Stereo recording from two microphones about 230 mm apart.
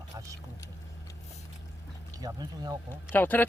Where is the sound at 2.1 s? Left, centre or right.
Centre.